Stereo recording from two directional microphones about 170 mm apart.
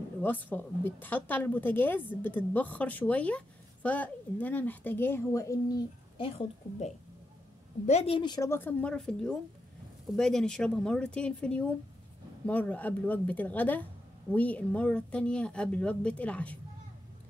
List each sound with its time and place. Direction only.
0.2 s a woman's voice: 10° left (ahead or behind); by 8.5 s 25° left (ahead or behind)
8.5 s a woman's voice: 10° left (ahead or behind)